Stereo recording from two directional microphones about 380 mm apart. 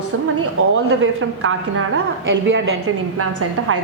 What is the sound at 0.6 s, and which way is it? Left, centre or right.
Speech, right.